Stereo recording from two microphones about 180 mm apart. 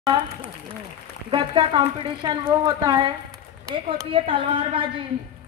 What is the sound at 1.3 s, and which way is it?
A woman's voice, 30° right (ahead or behind).